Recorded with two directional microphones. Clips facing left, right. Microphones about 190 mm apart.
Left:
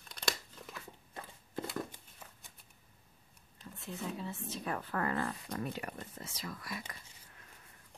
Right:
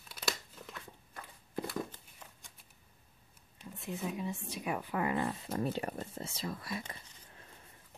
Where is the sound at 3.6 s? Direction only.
15° right (ahead or behind).